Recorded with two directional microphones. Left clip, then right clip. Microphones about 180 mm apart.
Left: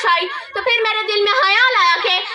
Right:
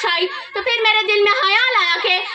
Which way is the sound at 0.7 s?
25° right (ahead or behind).